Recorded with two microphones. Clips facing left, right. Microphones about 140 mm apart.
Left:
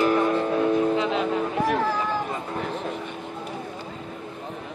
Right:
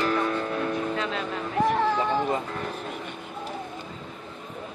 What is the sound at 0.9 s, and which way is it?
Music, 15° left (ahead or behind).